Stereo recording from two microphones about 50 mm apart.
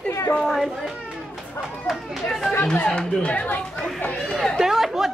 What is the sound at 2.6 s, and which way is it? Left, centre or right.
Speech, left.